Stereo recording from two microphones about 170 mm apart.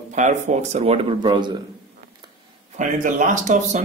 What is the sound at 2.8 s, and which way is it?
Speech, 50° right (ahead or behind).